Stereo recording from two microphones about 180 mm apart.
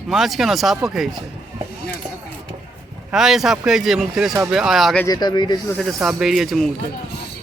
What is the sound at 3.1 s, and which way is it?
Speech, centre (ahead or behind).